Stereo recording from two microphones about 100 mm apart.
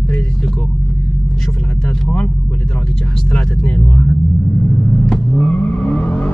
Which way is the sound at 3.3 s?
10° left (ahead or behind).